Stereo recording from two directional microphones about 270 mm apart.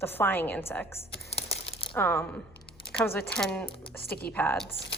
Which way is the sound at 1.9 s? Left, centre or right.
Centre.